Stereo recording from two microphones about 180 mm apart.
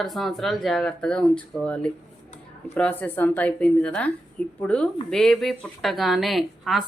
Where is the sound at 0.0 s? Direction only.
Centre (ahead or behind).